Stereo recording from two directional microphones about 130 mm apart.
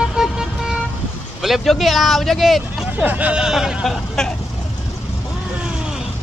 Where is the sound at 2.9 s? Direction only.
10° right (ahead or behind).